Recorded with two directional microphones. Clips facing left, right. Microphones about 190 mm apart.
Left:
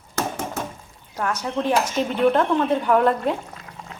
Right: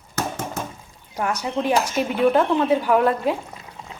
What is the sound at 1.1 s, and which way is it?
Speech, 10° right (ahead or behind).